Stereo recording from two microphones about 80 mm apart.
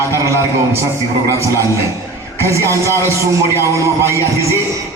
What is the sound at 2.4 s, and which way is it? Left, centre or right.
A man's voice, right.